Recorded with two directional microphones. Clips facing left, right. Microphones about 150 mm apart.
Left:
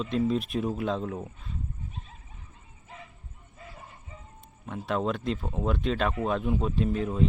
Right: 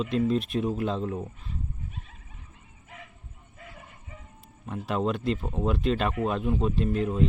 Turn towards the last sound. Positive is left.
turn(degrees=0)  # may be behind; listen again after turning